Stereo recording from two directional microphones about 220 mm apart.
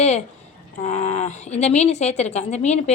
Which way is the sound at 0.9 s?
30° left (ahead or behind).